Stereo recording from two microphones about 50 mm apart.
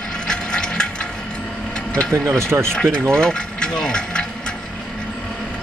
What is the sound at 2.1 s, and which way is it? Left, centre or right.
Speech, right.